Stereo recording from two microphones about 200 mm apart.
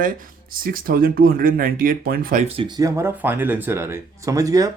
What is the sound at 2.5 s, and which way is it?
Speech, 20° right (ahead or behind).